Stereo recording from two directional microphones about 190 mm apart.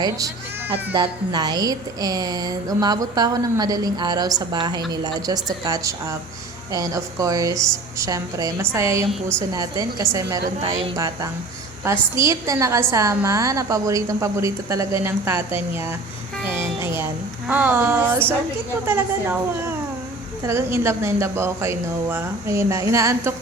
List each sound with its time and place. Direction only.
0.9 s a woman's voice: 20° right (ahead or behind)
10.6 s a woman's voice: 30° right (ahead or behind)
10.9 s a woman's voice: 15° right (ahead or behind)